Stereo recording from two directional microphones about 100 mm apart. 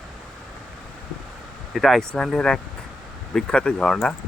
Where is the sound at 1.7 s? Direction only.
Centre (ahead or behind).